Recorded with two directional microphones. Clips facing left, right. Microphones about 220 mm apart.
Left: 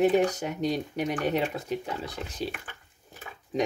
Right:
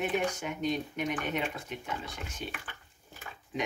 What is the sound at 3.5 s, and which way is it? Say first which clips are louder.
Speech: left 7 dB; 40° left (ahead or behind).